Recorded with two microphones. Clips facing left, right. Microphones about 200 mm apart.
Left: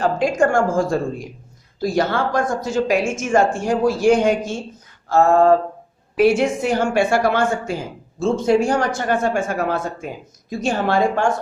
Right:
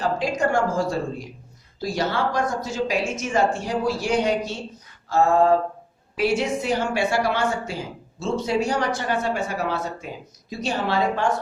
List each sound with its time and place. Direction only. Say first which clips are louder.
0.0 s speech: left 6 dB; 50° left (ahead or behind)
6.1 s speech: left 6 dB; 50° left (ahead or behind)